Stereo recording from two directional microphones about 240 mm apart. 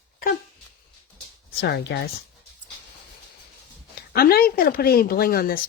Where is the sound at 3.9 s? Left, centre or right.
Left.